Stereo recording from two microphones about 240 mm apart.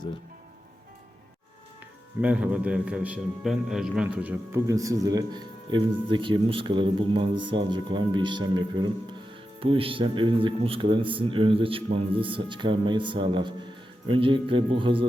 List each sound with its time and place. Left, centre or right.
2.2 s a man's voice: centre; by 15.0 s right